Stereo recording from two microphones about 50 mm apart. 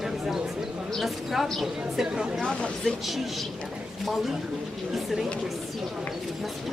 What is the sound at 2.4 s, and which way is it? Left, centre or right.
Speech, left.